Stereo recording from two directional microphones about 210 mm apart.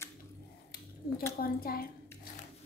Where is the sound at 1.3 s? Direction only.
45° left (ahead or behind).